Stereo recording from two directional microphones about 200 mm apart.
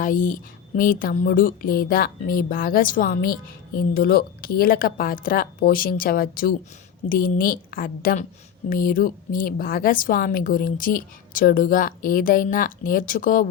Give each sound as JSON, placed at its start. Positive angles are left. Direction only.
{"t": 0.0, "sound": "a woman's voice", "side_deg": 40}